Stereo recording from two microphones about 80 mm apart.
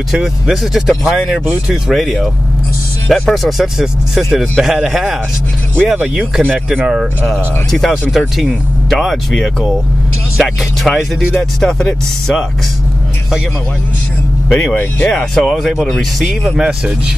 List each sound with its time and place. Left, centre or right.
0.1 s speech: centre
5.9 s speech: centre
7.7 s speech: centre
8.1 s speech: centre
8.9 s speech: centre
14.5 s speech: centre